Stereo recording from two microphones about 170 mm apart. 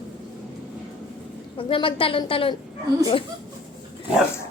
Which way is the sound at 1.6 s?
30° left (ahead or behind).